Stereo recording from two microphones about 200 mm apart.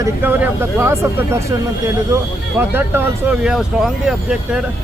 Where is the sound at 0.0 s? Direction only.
10° right (ahead or behind).